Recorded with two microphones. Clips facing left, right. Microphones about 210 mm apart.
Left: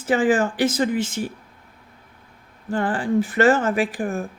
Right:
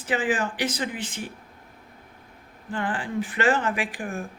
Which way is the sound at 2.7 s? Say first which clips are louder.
Left 7 dB; 40° left (ahead or behind).